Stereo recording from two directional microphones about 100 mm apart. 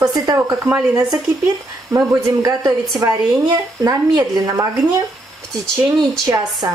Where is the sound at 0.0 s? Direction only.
40° right (ahead or behind).